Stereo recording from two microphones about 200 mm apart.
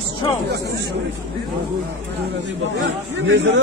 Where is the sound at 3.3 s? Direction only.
60° right (ahead or behind).